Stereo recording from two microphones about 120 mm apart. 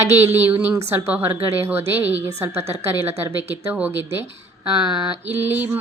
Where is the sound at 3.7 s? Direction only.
10° right (ahead or behind).